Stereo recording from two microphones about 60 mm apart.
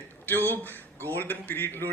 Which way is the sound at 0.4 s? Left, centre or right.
Left.